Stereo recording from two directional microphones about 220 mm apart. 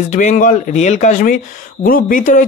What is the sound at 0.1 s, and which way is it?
Speech, 35° left (ahead or behind).